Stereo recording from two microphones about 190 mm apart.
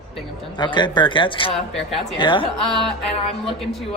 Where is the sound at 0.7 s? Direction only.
25° left (ahead or behind).